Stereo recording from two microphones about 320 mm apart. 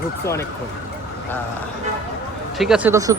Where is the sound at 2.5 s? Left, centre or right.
Centre.